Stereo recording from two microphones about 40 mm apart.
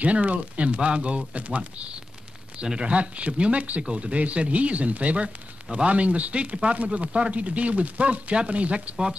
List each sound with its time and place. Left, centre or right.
0.0 s speech: right